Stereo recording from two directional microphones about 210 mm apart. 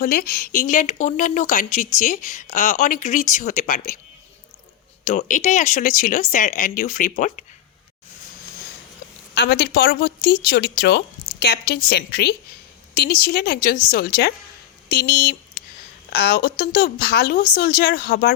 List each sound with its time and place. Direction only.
0.0 s speech: 45° left (ahead or behind)
5.0 s speech: 35° left (ahead or behind)
9.3 s a woman's voice: 50° left (ahead or behind)